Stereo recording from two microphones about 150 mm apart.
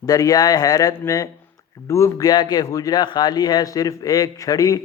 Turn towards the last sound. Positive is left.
turn(degrees=25)  # may be behind; listen again after turning